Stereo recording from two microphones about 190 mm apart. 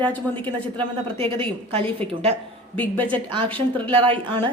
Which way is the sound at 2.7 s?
10° left (ahead or behind).